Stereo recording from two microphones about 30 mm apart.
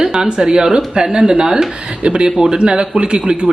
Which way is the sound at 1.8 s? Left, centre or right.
Right.